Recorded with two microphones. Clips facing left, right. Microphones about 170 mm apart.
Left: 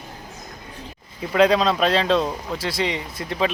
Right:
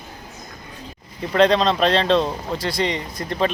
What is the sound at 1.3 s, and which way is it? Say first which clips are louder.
Speech: right 1 dB; 5° left (ahead or behind).